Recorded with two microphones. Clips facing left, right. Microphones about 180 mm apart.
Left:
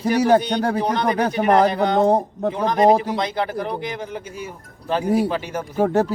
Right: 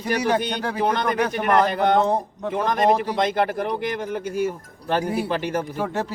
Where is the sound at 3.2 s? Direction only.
55° right (ahead or behind).